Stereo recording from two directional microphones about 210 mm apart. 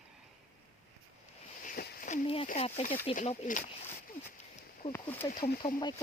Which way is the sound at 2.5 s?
30° left (ahead or behind).